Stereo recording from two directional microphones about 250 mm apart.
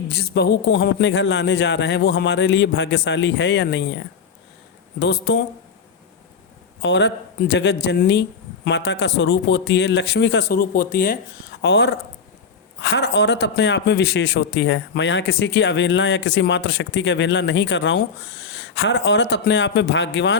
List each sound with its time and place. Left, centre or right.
0.1 s a man's voice: left
6.8 s a man's voice: left